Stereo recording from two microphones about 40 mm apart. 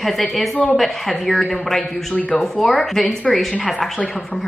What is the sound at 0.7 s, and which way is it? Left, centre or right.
Speech, centre.